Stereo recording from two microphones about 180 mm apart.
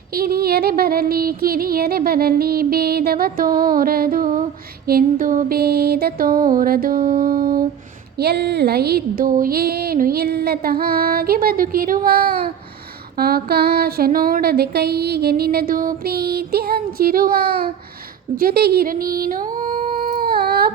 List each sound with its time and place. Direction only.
0.1 s music: 55° right (ahead or behind)
8.2 s music: 65° right (ahead or behind)
18.3 s a sound: 60° right (ahead or behind)